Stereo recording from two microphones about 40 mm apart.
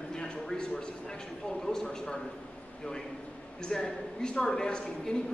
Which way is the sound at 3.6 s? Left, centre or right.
Centre.